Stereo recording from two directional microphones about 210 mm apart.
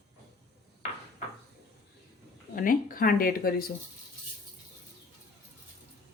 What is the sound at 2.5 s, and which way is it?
Speech, 40° left (ahead or behind).